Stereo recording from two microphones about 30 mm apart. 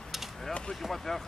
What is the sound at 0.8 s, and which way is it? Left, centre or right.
Speech, centre.